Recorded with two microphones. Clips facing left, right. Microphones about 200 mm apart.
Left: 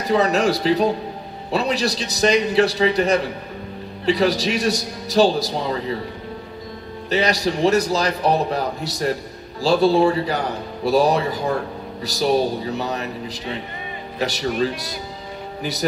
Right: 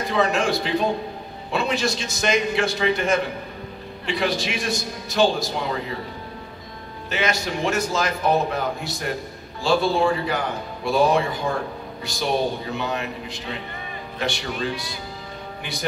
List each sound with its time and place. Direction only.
0.0 s a man's voice: 40° left (ahead or behind)
7.1 s a man's voice: 35° left (ahead or behind)